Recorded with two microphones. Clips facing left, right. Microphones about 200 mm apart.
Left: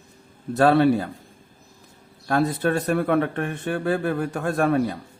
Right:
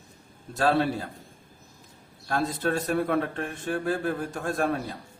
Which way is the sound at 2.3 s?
60° left (ahead or behind).